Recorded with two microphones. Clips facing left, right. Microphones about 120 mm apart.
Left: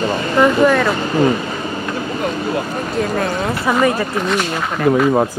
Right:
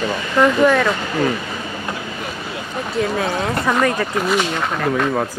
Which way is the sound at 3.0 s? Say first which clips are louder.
Even; centre (ahead or behind).